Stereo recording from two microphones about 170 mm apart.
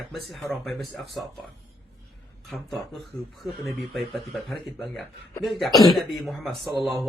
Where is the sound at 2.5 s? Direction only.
Centre (ahead or behind).